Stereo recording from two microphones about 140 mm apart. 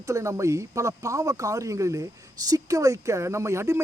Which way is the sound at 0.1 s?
20° right (ahead or behind).